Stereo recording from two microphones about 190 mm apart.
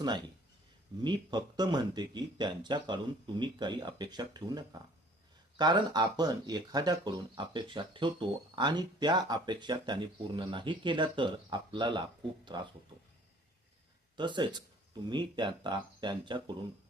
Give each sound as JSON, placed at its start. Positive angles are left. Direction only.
{"t": 1.0, "sound": "speech", "side_deg": -25}
{"t": 14.2, "sound": "speech", "side_deg": -25}